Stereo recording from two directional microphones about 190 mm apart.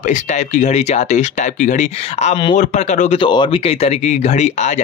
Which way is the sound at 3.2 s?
25° left (ahead or behind).